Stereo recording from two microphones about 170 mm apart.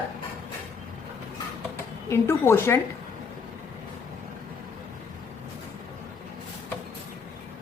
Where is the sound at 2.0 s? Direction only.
15° left (ahead or behind).